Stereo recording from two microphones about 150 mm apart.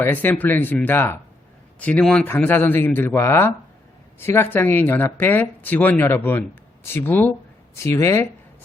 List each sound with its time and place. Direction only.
0.0 s speech: 10° left (ahead or behind)